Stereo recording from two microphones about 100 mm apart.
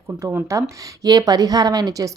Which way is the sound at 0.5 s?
30° right (ahead or behind).